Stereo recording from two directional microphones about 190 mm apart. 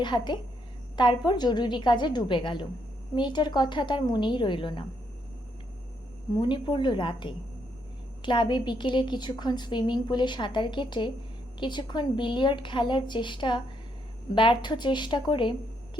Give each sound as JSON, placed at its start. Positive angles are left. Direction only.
{"t": 0.0, "sound": "a woman's voice", "side_deg": 25}
{"t": 6.3, "sound": "a woman's voice", "side_deg": 25}